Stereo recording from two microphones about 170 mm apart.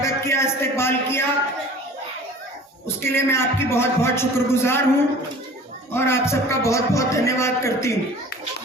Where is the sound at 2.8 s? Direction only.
15° left (ahead or behind).